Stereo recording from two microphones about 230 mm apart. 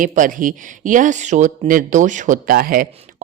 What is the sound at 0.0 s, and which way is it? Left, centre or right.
Speech, right.